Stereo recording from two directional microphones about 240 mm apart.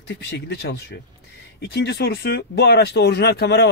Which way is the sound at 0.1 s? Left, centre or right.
Left.